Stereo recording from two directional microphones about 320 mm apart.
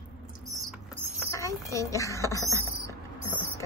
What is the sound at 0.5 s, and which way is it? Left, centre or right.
Rodents, centre.